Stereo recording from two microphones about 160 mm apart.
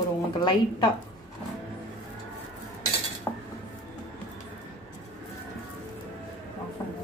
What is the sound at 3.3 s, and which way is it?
Cutlery, 5° left (ahead or behind).